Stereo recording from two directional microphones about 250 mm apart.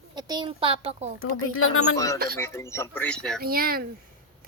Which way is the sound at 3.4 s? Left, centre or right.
Right.